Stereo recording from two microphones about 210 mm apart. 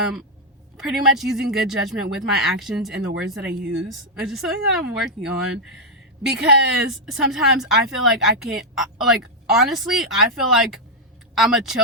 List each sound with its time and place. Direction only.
0.8 s a woman's voice: centre (ahead or behind)
3.5 s speech: 50° right (ahead or behind)
4.2 s a woman's voice: centre (ahead or behind)